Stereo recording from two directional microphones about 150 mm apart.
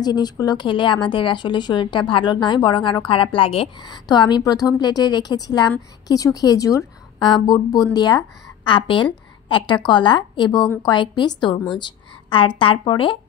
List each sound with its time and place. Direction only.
0.0 s a woman's voice: 25° left (ahead or behind)